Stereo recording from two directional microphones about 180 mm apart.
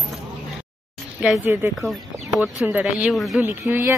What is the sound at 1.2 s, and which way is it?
Speech, 10° right (ahead or behind).